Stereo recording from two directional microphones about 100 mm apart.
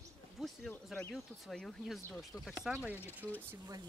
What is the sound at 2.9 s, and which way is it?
Speech, 20° left (ahead or behind).